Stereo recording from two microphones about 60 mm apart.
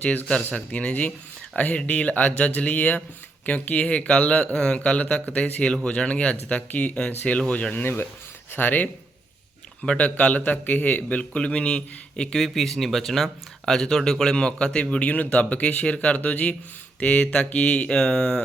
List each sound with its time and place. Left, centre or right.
0.0 s a man's voice: left
9.8 s a man's voice: centre